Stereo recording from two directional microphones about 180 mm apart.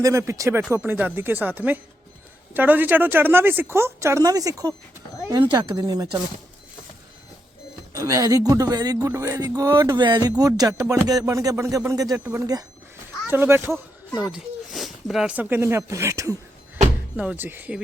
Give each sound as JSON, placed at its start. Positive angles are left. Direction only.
{"t": 0.0, "sound": "speech", "side_deg": -15}
{"t": 7.9, "sound": "speech", "side_deg": -20}